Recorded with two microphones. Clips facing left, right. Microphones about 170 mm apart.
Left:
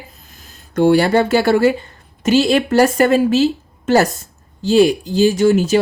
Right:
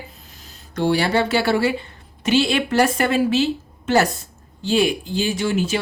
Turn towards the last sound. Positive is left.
turn(degrees=40)  # may be behind; listen again after turning